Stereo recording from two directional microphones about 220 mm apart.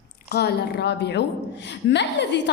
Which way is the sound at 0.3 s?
45° left (ahead or behind).